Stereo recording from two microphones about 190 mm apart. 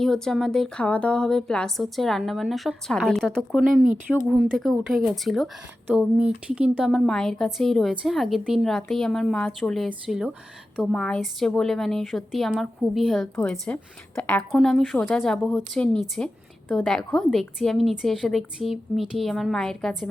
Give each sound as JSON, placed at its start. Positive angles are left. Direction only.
{"t": 0.0, "sound": "a woman's voice", "side_deg": 0}